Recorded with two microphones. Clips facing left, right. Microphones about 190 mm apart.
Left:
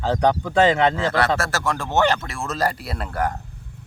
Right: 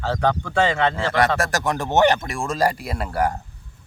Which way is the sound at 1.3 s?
15° right (ahead or behind).